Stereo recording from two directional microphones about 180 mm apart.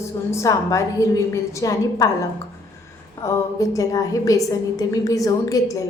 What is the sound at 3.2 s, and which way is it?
A woman's voice, 20° left (ahead or behind).